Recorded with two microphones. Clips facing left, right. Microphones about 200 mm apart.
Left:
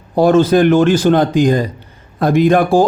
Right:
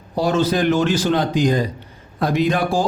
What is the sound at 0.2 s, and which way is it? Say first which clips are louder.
Speech: left 8 dB; 55° left (ahead or behind).